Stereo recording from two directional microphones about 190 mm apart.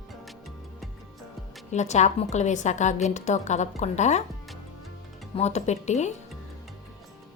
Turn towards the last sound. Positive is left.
turn(degrees=35)  # may be behind; listen again after turning